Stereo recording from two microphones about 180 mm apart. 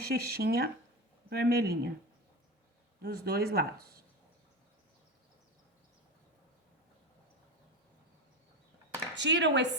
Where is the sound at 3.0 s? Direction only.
60° right (ahead or behind).